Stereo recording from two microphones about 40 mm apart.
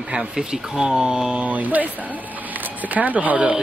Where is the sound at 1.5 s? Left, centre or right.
Right.